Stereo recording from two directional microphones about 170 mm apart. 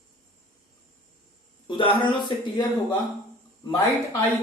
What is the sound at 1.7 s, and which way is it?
Speech, 30° left (ahead or behind).